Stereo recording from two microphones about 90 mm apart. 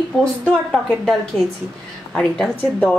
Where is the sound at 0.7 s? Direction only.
5° left (ahead or behind).